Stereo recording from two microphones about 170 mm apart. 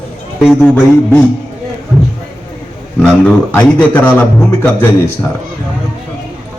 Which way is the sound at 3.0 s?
10° left (ahead or behind).